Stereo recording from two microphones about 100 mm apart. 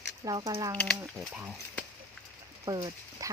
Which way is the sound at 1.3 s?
15° right (ahead or behind).